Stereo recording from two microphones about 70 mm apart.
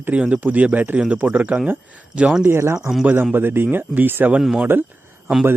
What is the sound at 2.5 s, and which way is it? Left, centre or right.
Speech, right.